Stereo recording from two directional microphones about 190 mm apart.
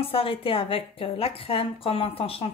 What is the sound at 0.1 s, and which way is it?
A woman's voice, 30° left (ahead or behind).